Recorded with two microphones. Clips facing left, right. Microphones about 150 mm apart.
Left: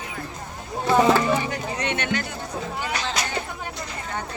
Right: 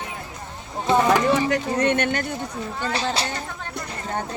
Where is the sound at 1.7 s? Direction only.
50° right (ahead or behind).